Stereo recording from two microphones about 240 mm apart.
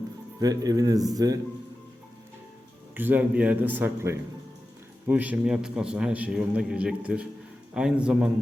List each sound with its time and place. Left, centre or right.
0.3 s a man's voice: centre
2.9 s a man's voice: centre